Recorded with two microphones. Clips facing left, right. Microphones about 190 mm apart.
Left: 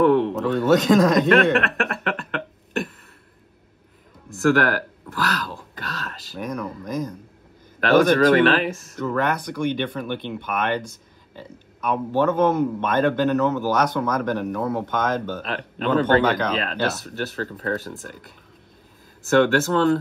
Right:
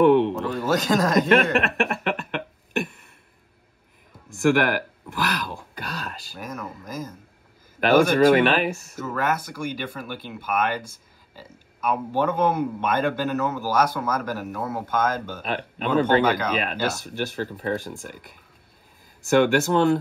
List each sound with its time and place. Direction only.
0.0 s a sound: 25° right (ahead or behind)
0.3 s speech: centre (ahead or behind)
1.9 s a sound: 15° right (ahead or behind)
4.4 s speech: 15° right (ahead or behind)
6.3 s speech: 5° right (ahead or behind)
19.2 s speech: 15° right (ahead or behind)